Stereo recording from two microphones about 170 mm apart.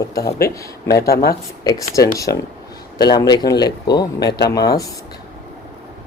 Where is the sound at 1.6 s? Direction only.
20° left (ahead or behind).